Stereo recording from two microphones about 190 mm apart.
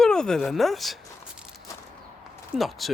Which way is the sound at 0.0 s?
5° left (ahead or behind).